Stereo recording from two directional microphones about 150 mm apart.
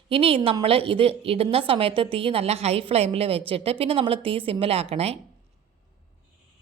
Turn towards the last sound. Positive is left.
turn(degrees=-40)  # may be behind; listen again after turning